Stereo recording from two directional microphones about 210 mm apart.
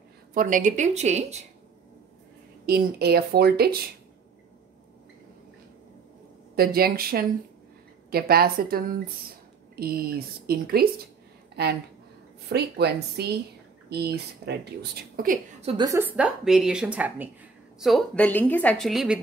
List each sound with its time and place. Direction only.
0.3 s a woman's voice: 40° right (ahead or behind)
2.6 s speech: 50° right (ahead or behind)
6.5 s speech: 45° right (ahead or behind)
15.6 s a woman's voice: 15° right (ahead or behind); by 19.1 s centre (ahead or behind)